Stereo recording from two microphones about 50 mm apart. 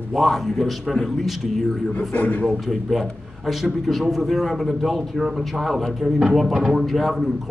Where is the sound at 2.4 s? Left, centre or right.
Centre.